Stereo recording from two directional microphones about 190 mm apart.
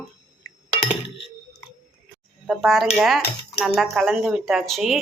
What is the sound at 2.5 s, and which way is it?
Speech, centre (ahead or behind).